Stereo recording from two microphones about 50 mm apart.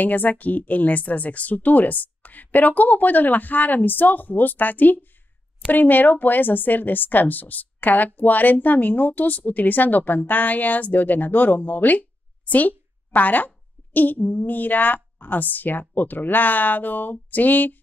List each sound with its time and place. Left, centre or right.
0.0 s speech: left